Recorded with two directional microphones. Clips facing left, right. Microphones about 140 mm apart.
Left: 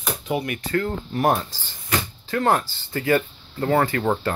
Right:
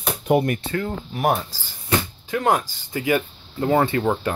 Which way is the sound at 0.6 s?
15° right (ahead or behind).